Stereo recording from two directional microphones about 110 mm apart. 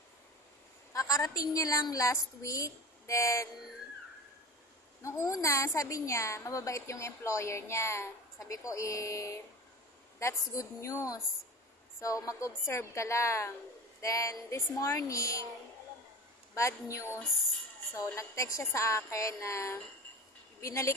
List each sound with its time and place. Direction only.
0.9 s a woman's voice: 30° left (ahead or behind)
5.0 s a woman's voice: 30° left (ahead or behind)
17.9 s a woman's voice: 30° left (ahead or behind)